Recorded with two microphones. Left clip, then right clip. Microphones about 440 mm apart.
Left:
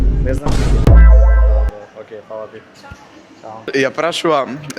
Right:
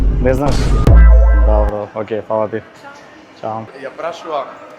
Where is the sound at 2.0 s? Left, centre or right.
Right.